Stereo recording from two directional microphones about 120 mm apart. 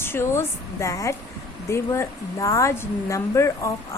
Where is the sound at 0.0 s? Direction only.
20° left (ahead or behind).